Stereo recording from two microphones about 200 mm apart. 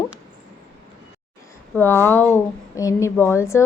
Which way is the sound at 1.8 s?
10° left (ahead or behind).